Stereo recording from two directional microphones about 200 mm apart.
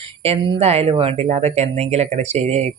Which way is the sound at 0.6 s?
30° right (ahead or behind).